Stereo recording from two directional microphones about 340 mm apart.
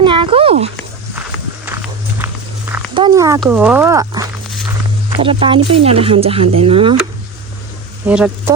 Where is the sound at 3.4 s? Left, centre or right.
Centre.